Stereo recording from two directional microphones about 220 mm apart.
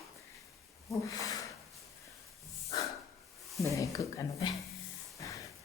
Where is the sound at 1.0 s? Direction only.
15° left (ahead or behind).